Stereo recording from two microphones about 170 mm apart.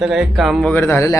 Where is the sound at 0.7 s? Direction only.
15° left (ahead or behind).